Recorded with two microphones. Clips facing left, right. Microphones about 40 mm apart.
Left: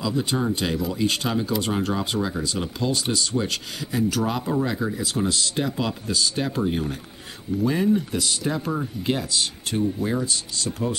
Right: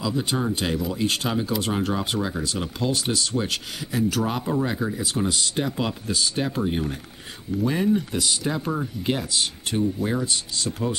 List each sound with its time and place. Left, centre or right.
0.0 s speech: centre
9.3 s speech: centre